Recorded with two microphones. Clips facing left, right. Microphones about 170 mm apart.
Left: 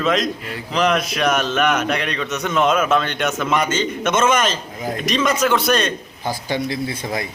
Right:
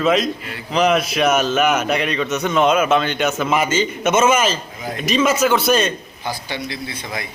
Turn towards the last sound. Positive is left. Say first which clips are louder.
# left 4 dB
turn(degrees=45)  # may be behind; listen again after turning